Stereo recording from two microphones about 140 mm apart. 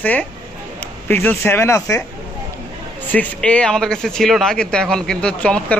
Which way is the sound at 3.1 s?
10° left (ahead or behind).